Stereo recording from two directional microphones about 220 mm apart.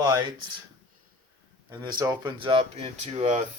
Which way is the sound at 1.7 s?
20° right (ahead or behind).